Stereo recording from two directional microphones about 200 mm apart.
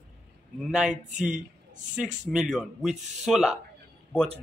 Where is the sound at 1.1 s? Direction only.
40° right (ahead or behind).